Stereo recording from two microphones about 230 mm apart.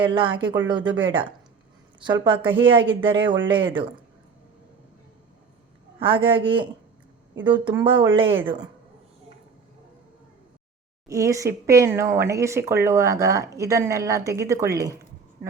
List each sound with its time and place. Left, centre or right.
0.0 s a man's voice: right
6.0 s a man's voice: right
8.2 s a woman's voice: right
11.1 s speech: centre